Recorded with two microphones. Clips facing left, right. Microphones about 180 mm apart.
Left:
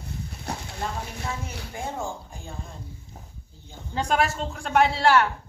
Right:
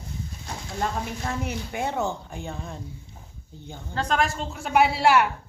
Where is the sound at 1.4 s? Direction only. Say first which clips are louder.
Right 5 dB; 70° right (ahead or behind).